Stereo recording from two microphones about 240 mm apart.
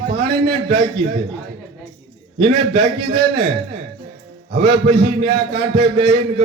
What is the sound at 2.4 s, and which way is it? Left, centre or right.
A man's voice, right.